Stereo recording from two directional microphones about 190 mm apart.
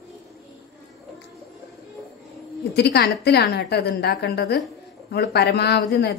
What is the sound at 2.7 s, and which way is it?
A woman's voice, 60° left (ahead or behind).